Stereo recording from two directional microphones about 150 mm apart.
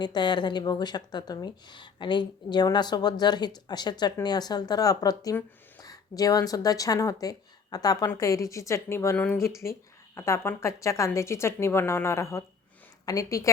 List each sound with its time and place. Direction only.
0.0 s speech: 30° left (ahead or behind)